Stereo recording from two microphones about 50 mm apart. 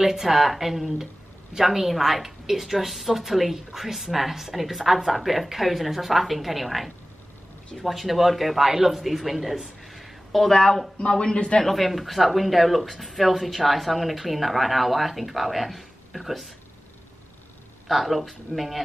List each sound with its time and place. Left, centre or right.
0.0 s a woman's voice: centre
10.5 s a man's voice: centre
11.6 s a woman's voice: centre
17.8 s a woman's voice: centre